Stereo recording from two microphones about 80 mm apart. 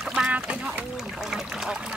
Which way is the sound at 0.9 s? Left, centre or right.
Centre.